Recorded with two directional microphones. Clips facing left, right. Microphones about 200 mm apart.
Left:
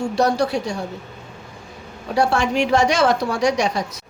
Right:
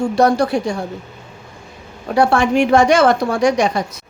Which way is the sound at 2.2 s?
55° right (ahead or behind).